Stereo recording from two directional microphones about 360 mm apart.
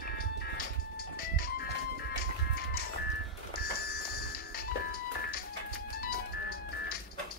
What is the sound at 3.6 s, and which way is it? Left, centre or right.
Music, left.